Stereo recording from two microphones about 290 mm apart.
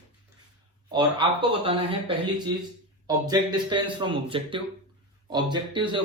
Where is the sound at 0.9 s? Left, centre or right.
Centre.